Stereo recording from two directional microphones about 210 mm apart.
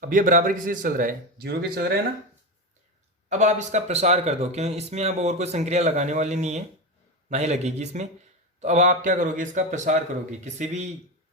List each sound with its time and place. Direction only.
0.0 s speech: 40° right (ahead or behind)
3.2 s speech: 35° right (ahead or behind)